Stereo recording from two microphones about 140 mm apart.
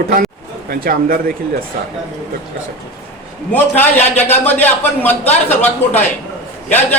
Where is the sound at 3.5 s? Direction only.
15° left (ahead or behind).